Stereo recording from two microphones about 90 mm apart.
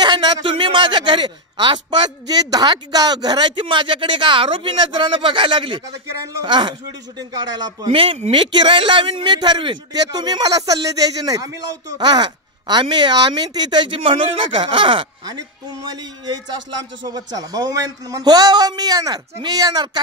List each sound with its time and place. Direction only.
0.0 s speech: 60° right (ahead or behind)
6.4 s speech: 60° right (ahead or behind)
7.2 s speech: 45° right (ahead or behind)
7.9 s a man's voice: 80° right; by 9.8 s 60° right (ahead or behind)
9.9 s speech: 50° right (ahead or behind)
12.0 s speech: 50° right (ahead or behind); by 15.0 s 75° right (ahead or behind)
15.9 s speech: 50° right (ahead or behind)